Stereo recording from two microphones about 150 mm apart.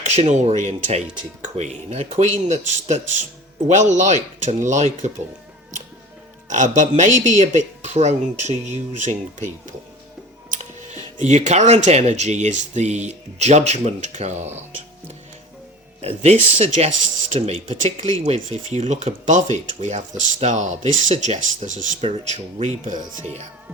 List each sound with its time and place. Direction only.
0.0 s speech: 50° right (ahead or behind)
6.5 s speech: 55° right (ahead or behind)
10.5 s speech: 50° right (ahead or behind)
16.0 s speech: 45° right (ahead or behind)